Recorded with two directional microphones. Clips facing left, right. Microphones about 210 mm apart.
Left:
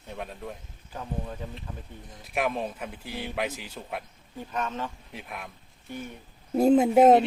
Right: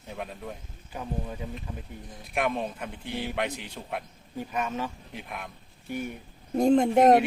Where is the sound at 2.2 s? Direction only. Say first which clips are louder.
Even; centre (ahead or behind).